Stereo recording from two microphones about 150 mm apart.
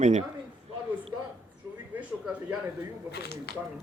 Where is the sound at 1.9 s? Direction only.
5° right (ahead or behind).